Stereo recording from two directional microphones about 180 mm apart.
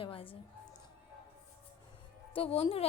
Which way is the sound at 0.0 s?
30° left (ahead or behind).